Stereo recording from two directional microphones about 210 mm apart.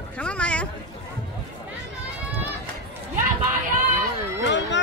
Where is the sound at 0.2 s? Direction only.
5° left (ahead or behind).